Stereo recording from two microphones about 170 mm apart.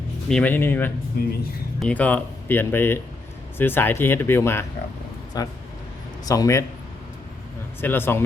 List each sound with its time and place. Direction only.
0.3 s speech: 5° left (ahead or behind)
1.2 s speech: 65° left (ahead or behind)
1.8 s speech: 10° left (ahead or behind)
7.8 s speech: 10° left (ahead or behind)